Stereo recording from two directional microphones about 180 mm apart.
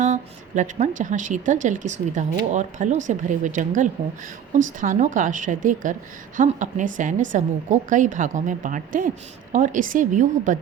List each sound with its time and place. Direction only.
0.0 s a woman's voice: 40° right (ahead or behind)